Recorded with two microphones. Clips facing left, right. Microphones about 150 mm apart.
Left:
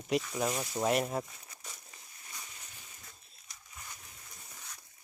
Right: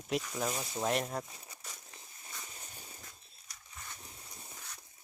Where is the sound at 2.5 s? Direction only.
35° right (ahead or behind).